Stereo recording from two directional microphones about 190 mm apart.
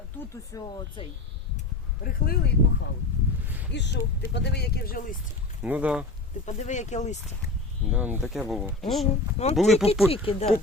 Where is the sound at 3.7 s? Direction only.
65° left (ahead or behind); by 5.2 s 50° left (ahead or behind).